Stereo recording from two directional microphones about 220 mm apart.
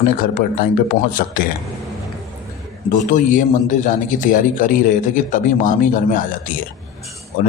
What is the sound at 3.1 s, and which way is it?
A man's voice, 35° left (ahead or behind).